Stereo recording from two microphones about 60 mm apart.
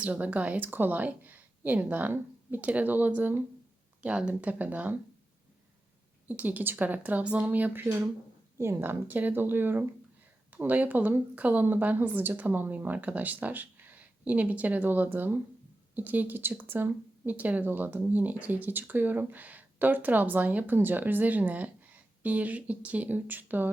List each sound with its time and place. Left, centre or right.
0.0 s speech: right
4.0 s speech: centre
6.2 s speech: right
8.5 s speech: right
17.3 s speech: right